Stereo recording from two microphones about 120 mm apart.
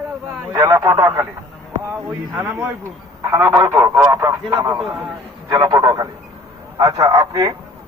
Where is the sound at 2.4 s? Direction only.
20° right (ahead or behind).